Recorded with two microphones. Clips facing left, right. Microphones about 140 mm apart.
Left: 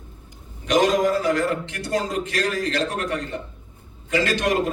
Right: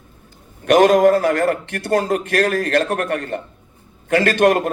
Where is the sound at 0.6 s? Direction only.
55° right (ahead or behind).